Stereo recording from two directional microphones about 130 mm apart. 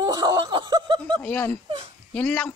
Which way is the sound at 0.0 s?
30° right (ahead or behind).